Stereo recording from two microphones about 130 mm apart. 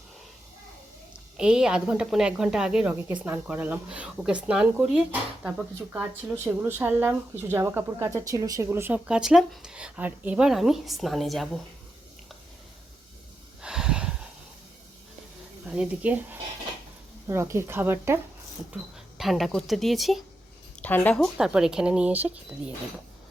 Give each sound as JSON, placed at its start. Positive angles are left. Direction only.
{"t": 1.4, "sound": "speech", "side_deg": -5}
{"t": 9.0, "sound": "speech", "side_deg": -5}
{"t": 13.6, "sound": "a sound", "side_deg": -5}
{"t": 15.6, "sound": "speech", "side_deg": -5}
{"t": 18.7, "sound": "speech", "side_deg": 0}
{"t": 20.8, "sound": "speech", "side_deg": 10}
{"t": 21.3, "sound": "speech", "side_deg": -5}